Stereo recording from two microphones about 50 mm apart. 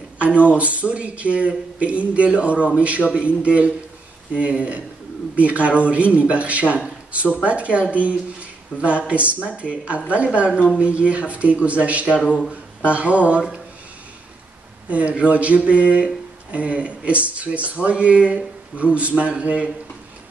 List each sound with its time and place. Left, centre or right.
0.5 s speech: right
14.9 s speech: right